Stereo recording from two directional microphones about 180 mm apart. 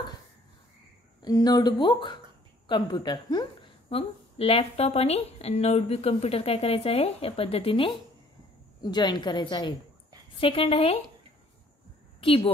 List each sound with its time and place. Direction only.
1.2 s a woman's voice: 20° left (ahead or behind)